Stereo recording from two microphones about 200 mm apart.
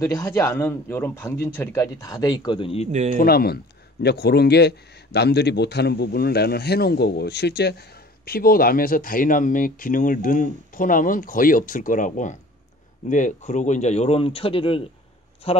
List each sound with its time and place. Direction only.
0.0 s speech: 15° left (ahead or behind)
2.9 s speech: 35° right (ahead or behind)
3.2 s a man's voice: 50° left (ahead or behind); by 15.6 s 30° left (ahead or behind)